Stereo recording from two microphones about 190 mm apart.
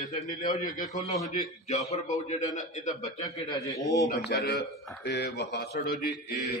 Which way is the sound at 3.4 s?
20° left (ahead or behind).